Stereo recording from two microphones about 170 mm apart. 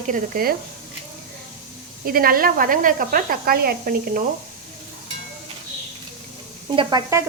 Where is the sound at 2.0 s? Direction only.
60° right (ahead or behind).